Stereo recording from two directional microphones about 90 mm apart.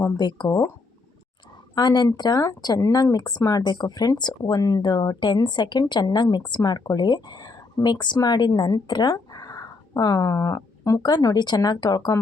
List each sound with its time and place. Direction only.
0.2 s speech: 50° left (ahead or behind)
1.7 s a woman's voice: 50° left (ahead or behind)
6.6 s speech: 45° left (ahead or behind)